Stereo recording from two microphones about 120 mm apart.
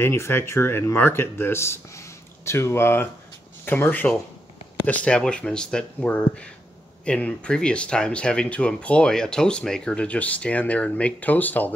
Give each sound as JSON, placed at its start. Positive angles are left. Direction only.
{"t": 0.0, "sound": "speech", "side_deg": 20}